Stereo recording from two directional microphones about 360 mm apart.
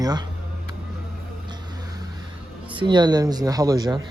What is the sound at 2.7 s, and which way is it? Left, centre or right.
Speech, centre.